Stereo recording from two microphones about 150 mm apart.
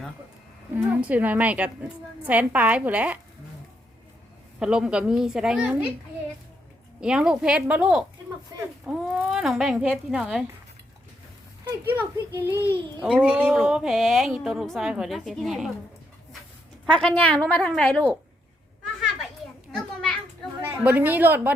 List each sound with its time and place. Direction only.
0.7 s a woman's voice: 10° right (ahead or behind)
4.6 s speech: 5° right (ahead or behind)
7.0 s speech: 5° right (ahead or behind)
11.9 s a woman's voice: 15° right (ahead or behind)
16.9 s a woman's voice: 10° left (ahead or behind)
19.7 s children playing: 5° left (ahead or behind)
20.6 s a woman's voice: 15° right (ahead or behind)